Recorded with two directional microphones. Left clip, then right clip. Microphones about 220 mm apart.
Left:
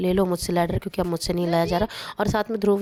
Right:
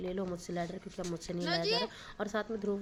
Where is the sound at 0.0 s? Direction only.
50° left (ahead or behind).